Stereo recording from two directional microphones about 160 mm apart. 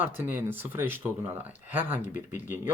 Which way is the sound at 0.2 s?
15° right (ahead or behind).